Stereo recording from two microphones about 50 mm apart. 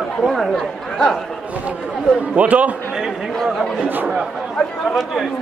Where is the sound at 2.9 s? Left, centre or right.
Centre.